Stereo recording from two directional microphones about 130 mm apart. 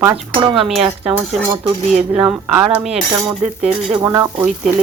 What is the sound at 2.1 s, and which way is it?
Speech, 5° right (ahead or behind).